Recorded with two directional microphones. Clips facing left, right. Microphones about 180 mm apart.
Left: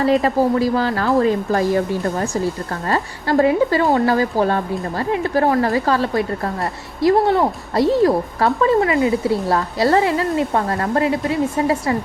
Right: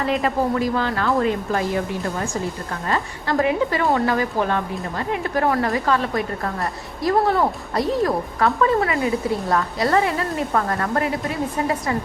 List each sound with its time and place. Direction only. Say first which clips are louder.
0.0 s a woman's voice: left 5 dB; 35° left (ahead or behind)